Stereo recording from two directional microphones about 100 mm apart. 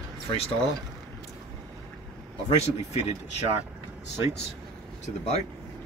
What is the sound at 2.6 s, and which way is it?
Speech, 90° left.